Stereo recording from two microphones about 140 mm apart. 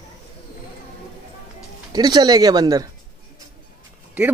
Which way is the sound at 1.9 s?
30° right (ahead or behind).